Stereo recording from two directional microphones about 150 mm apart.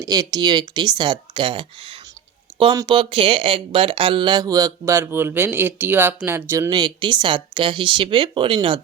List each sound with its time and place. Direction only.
0.0 s speech: 25° right (ahead or behind)